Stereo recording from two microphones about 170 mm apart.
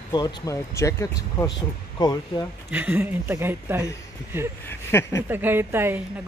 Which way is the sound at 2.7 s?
10° right (ahead or behind).